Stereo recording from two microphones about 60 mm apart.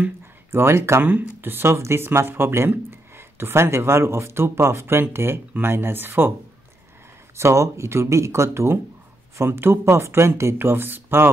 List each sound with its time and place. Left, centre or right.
0.5 s speech: right
1.0 s speech: right
7.3 s speech: right